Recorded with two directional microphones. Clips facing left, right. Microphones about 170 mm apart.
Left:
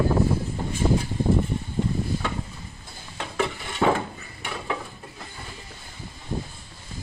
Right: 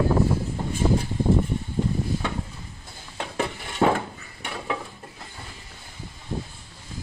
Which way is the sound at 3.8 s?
35° right (ahead or behind).